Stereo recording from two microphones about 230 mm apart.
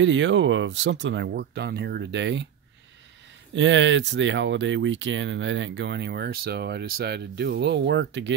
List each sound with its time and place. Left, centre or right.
0.0 s speech: right
3.5 s speech: right